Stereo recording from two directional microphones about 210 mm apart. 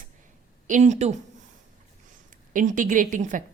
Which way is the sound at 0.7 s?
35° right (ahead or behind).